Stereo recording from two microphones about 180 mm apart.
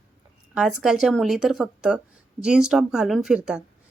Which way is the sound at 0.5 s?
5° right (ahead or behind).